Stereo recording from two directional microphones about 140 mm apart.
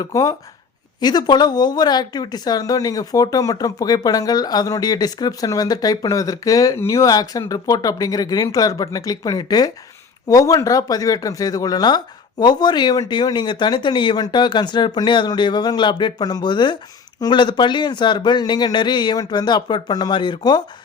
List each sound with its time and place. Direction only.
0.0 s speech: 25° left (ahead or behind)